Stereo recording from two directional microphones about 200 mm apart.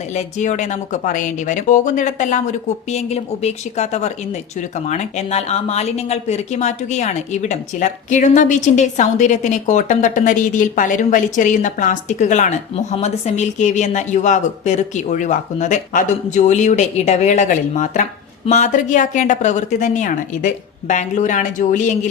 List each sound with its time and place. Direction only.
0.1 s speech: 35° left (ahead or behind)